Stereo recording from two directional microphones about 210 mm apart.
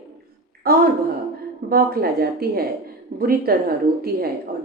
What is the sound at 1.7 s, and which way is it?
A woman's voice, 45° right (ahead or behind).